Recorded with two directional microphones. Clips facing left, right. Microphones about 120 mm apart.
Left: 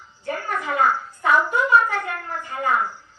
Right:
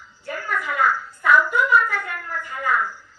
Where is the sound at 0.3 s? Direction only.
25° left (ahead or behind).